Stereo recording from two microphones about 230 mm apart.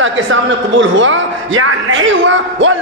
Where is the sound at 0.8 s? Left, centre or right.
Right.